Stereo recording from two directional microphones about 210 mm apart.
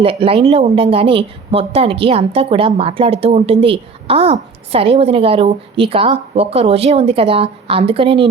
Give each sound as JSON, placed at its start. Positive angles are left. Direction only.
{"t": 0.0, "sound": "speech", "side_deg": -25}